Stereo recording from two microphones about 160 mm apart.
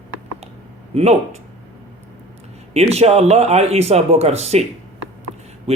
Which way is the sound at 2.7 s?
40° right (ahead or behind).